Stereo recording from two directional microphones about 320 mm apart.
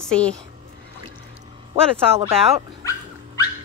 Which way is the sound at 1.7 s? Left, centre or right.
Centre.